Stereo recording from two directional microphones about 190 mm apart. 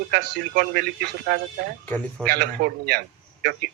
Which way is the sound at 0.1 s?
50° right (ahead or behind).